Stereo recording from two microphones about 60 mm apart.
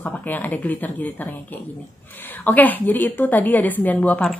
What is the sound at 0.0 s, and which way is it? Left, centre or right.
Speech, left.